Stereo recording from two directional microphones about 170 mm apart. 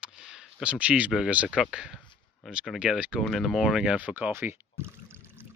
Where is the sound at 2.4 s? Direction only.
Centre (ahead or behind).